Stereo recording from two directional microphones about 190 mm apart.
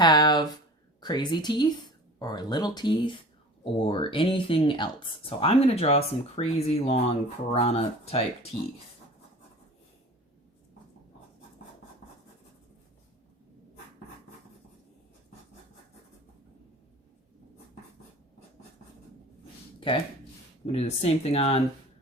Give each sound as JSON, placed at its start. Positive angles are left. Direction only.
{"t": 0.0, "sound": "a sound", "side_deg": 20}
{"t": 1.0, "sound": "speech", "side_deg": 20}
{"t": 20.7, "sound": "speech", "side_deg": 30}